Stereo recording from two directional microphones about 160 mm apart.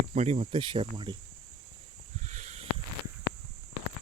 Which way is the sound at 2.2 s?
45° right (ahead or behind).